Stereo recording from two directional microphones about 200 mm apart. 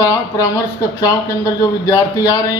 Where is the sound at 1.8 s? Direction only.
15° left (ahead or behind).